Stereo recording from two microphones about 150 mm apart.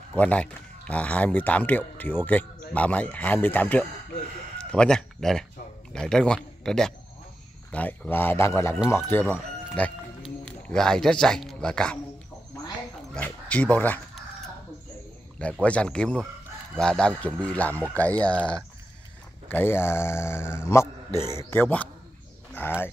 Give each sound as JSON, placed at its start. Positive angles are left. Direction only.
{"t": 0.1, "sound": "a man's voice", "side_deg": 10}
{"t": 13.1, "sound": "speech", "side_deg": 10}
{"t": 15.6, "sound": "speech", "side_deg": 5}
{"t": 19.4, "sound": "speech", "side_deg": 15}